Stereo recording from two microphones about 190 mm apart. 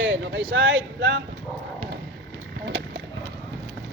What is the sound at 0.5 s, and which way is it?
Speech, 80° right.